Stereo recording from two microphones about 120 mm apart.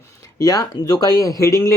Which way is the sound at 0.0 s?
25° left (ahead or behind).